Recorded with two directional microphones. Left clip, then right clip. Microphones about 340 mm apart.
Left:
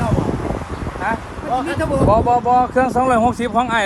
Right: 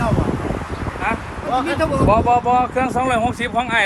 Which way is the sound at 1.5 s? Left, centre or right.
Left.